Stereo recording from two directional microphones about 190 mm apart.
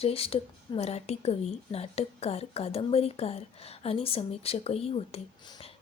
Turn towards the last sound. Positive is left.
turn(degrees=30)  # may be behind; listen again after turning